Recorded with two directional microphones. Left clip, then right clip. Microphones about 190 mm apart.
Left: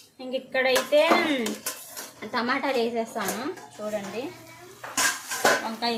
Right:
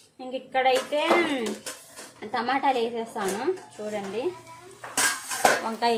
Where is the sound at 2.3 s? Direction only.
20° right (ahead or behind).